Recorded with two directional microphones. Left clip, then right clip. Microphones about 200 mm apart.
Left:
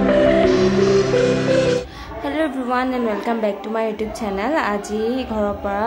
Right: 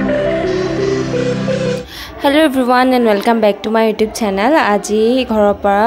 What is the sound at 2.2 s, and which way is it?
A woman's voice, 40° right (ahead or behind).